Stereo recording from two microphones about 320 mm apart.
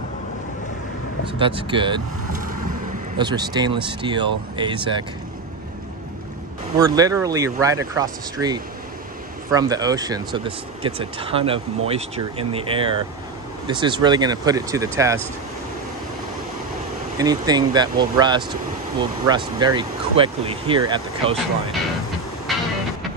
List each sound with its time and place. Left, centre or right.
1.4 s speech: centre
3.2 s speech: centre
6.8 s speech: centre
17.2 s speech: centre
22.5 s music: centre